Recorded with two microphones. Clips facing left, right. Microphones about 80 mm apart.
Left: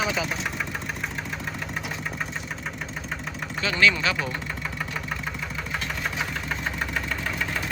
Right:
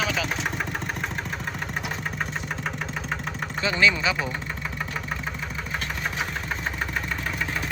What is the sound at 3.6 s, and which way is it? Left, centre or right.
Vehicle, centre.